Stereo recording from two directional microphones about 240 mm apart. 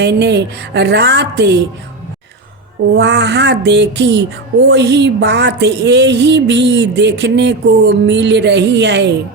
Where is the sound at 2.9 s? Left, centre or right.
Right.